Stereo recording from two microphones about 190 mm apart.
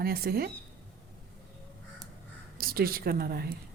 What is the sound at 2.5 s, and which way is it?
Speech, 50° right (ahead or behind).